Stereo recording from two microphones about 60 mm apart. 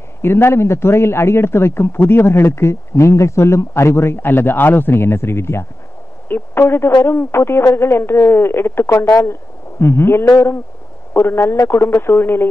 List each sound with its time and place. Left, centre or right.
0.2 s a man's voice: left